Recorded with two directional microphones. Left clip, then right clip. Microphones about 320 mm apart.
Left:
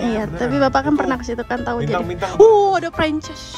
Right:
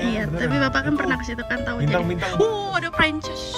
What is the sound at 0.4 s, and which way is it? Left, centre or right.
Speech, left.